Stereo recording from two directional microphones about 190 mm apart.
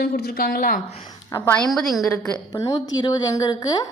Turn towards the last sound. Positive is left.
turn(degrees=20)  # may be behind; listen again after turning